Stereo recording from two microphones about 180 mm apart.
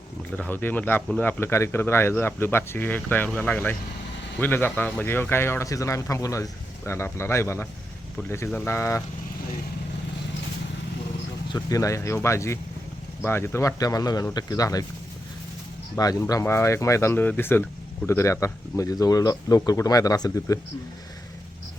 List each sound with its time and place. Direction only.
0.3 s speech: 10° left (ahead or behind)
11.5 s speech: 15° left (ahead or behind)
16.0 s speech: 20° left (ahead or behind)